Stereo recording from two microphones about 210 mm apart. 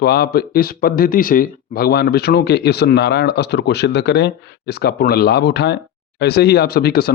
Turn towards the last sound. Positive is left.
turn(degrees=50)  # may be behind; listen again after turning